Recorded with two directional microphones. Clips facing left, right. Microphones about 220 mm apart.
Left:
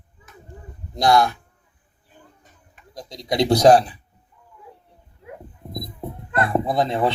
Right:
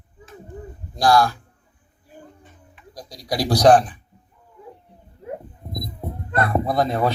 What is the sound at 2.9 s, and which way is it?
Speech, 25° left (ahead or behind).